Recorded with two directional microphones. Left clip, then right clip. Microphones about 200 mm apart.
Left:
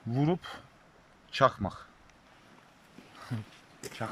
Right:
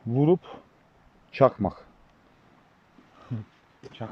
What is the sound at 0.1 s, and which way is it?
Speech, 20° right (ahead or behind).